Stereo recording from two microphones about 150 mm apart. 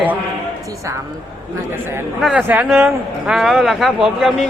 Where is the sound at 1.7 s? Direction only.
15° right (ahead or behind).